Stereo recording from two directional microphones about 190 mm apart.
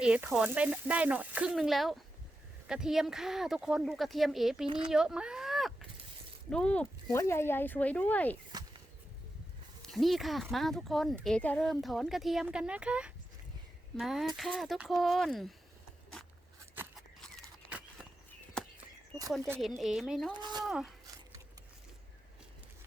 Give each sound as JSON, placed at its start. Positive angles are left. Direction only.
{"t": 0.0, "sound": "speech", "side_deg": -5}
{"t": 9.8, "sound": "speech", "side_deg": 0}
{"t": 17.7, "sound": "a sound", "side_deg": -5}
{"t": 19.5, "sound": "speech", "side_deg": 0}
{"t": 20.3, "sound": "speech", "side_deg": -25}
{"t": 20.7, "sound": "speech", "side_deg": 0}